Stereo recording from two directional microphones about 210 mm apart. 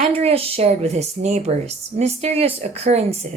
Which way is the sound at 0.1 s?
30° right (ahead or behind).